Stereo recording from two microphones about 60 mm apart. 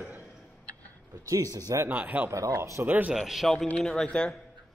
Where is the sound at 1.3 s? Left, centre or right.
Right.